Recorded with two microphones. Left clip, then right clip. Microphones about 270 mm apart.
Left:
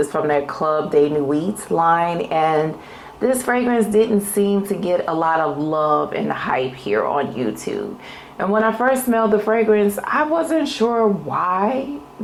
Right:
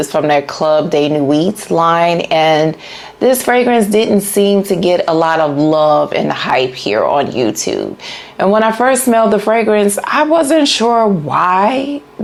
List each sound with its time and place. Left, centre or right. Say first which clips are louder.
0.1 s speech: right 7 dB; right
5.7 s speech: right 7 dB; right